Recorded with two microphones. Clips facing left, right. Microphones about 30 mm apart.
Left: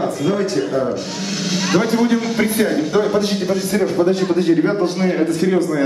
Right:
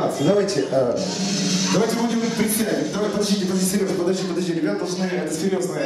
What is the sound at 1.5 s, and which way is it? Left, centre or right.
A man's voice, centre.